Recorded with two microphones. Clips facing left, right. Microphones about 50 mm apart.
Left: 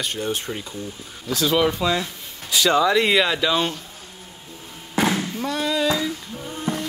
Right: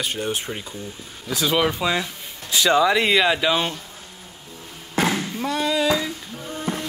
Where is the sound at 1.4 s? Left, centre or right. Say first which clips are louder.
Left 1 dB; right.